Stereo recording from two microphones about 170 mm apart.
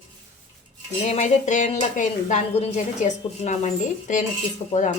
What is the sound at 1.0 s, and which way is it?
Speech, 40° left (ahead or behind).